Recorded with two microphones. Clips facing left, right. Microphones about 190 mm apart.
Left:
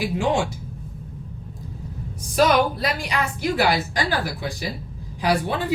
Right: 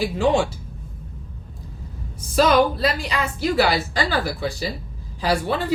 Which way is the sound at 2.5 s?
15° left (ahead or behind).